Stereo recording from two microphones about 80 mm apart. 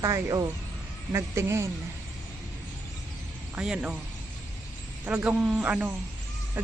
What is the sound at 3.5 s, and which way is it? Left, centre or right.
Speech, centre.